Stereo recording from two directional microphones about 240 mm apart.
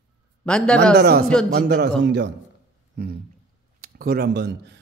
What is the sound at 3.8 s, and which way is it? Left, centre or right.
Speech, right.